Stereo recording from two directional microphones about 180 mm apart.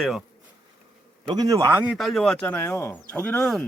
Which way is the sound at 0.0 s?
Centre (ahead or behind).